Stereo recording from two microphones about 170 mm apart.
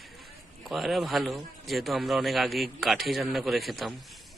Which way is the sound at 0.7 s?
Centre (ahead or behind).